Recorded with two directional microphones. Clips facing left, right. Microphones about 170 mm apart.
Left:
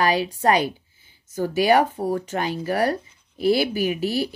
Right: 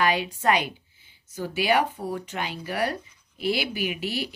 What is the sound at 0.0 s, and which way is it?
Speech, 35° left (ahead or behind).